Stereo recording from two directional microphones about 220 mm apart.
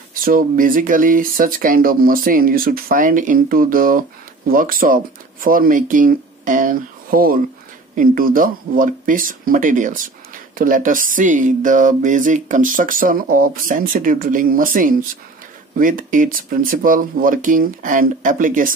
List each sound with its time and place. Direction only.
0.1 s speech: 40° right (ahead or behind)